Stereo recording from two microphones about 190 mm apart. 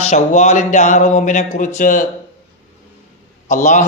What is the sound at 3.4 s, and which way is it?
Speech, 40° left (ahead or behind).